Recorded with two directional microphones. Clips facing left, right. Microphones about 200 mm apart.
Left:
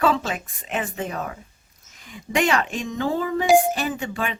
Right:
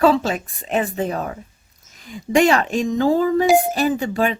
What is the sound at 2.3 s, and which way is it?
Speech, 35° right (ahead or behind).